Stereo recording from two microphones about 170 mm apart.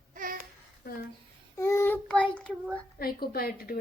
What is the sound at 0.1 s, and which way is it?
Babbling, 55° right (ahead or behind).